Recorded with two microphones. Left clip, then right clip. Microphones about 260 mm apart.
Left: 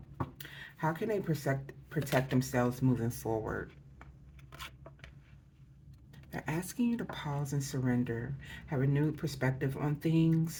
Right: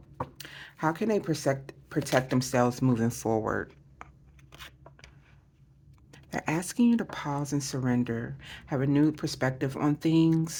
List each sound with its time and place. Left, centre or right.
0.3 s a sound: right
2.1 s speech: right
6.1 s speech: right